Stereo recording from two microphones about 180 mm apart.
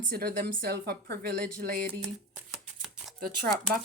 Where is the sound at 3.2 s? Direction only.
55° right (ahead or behind).